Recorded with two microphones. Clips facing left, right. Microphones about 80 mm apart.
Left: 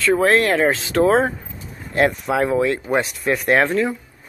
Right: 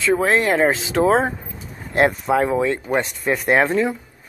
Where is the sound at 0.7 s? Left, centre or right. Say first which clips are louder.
Left 1 dB; centre.